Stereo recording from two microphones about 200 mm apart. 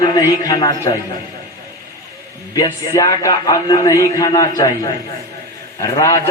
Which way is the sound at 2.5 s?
20° left (ahead or behind).